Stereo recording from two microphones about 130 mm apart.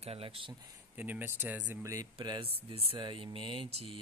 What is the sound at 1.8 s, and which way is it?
Speech, 25° right (ahead or behind).